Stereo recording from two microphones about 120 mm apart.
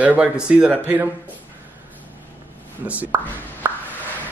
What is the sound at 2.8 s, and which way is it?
Speech, 10° right (ahead or behind).